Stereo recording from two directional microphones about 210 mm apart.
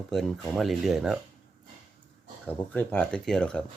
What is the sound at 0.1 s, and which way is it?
Speech, centre (ahead or behind).